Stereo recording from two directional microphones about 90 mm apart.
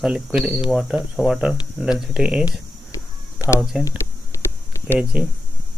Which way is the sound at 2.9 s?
40° left (ahead or behind).